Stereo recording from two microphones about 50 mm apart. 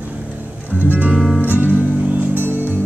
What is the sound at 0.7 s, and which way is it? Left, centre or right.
Music, right.